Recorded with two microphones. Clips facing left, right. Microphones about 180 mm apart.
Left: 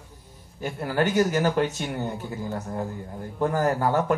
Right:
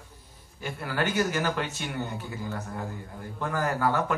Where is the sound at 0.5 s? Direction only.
45° left (ahead or behind).